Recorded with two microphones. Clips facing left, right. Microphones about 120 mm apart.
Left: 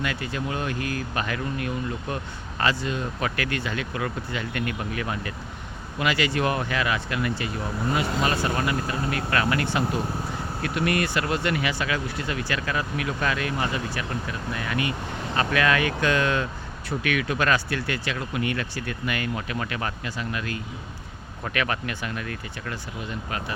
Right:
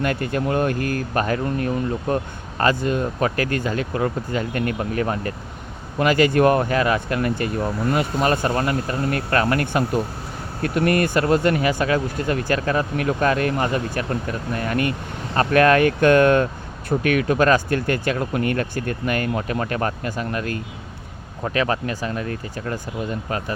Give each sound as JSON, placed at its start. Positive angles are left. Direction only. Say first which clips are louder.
{"t": 0.0, "sound": "speech", "louder": "right 7 dB", "side_deg": -50}
{"t": 21.4, "sound": "speech", "louder": "right 6 dB", "side_deg": -30}